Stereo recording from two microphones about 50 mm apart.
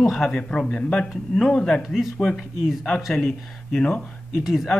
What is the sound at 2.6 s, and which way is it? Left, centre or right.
Speech, centre.